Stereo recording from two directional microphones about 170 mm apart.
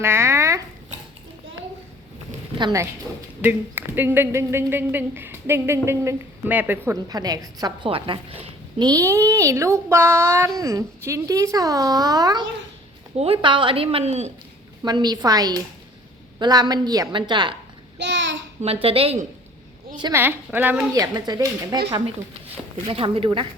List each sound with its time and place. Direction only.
0.0 s a sound: 15° right (ahead or behind)
2.6 s speech: 25° right (ahead or behind)
3.4 s speech: 10° right (ahead or behind); by 8.9 s 30° right (ahead or behind)
8.9 s speech: 15° right (ahead or behind)
13.1 s a woman's voice: 35° right (ahead or behind)
14.8 s speech: 25° right (ahead or behind)
17.9 s a sound: 90° right
18.6 s a woman's voice: 35° right (ahead or behind)
20.1 s speech: 10° right (ahead or behind)
20.9 s speech: 20° right (ahead or behind)
22.9 s a woman's voice: 35° right (ahead or behind)